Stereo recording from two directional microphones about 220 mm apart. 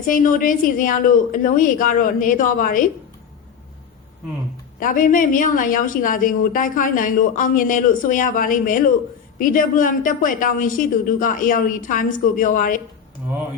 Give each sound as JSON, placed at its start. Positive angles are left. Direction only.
{"t": 0.0, "sound": "a woman's voice", "side_deg": 35}
{"t": 4.8, "sound": "a woman's voice", "side_deg": 35}